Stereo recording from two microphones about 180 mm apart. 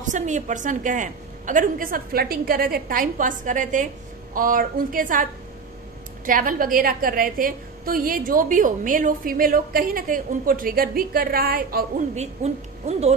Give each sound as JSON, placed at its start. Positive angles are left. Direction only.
{"t": 0.0, "sound": "a woman's voice", "side_deg": -45}
{"t": 12.2, "sound": "a woman's voice", "side_deg": -35}